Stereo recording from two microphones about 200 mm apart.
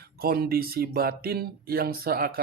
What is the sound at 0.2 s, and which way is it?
Speech, 50° right (ahead or behind).